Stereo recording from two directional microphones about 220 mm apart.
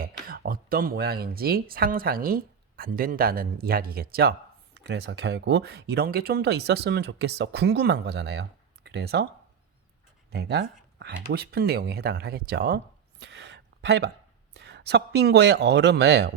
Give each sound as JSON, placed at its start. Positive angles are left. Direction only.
{"t": 0.3, "sound": "speech", "side_deg": -40}
{"t": 10.3, "sound": "speech", "side_deg": -45}